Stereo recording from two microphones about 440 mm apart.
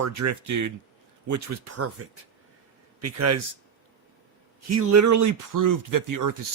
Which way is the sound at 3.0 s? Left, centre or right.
Right.